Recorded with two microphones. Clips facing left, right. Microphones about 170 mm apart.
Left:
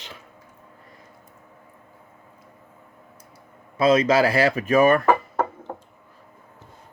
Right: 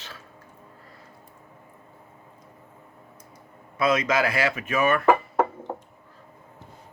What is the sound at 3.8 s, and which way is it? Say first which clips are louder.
Speech: left 5 dB; 30° left (ahead or behind).